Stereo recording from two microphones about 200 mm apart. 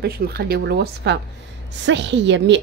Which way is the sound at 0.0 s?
50° right (ahead or behind).